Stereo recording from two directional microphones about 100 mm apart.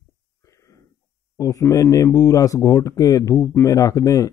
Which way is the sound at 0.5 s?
30° left (ahead or behind).